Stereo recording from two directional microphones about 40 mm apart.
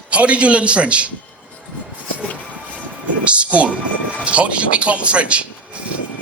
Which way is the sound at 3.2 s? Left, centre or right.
Right.